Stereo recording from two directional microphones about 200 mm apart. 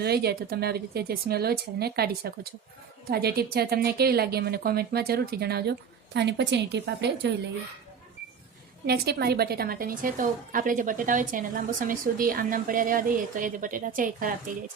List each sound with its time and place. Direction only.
0.0 s a woman's voice: 55° right (ahead or behind)
8.9 s a woman's voice: 50° right (ahead or behind)